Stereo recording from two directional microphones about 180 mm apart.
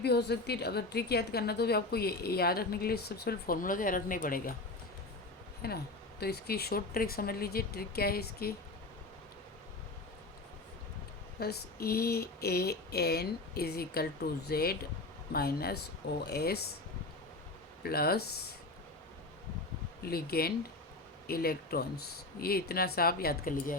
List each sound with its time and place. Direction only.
0.0 s a woman's voice: 65° left (ahead or behind); by 4.5 s 50° left (ahead or behind)
5.6 s a woman's voice: 60° left (ahead or behind)
11.3 s a woman's voice: 60° left (ahead or behind)
17.8 s a woman's voice: 60° left (ahead or behind)
20.0 s a woman's voice: 60° left (ahead or behind)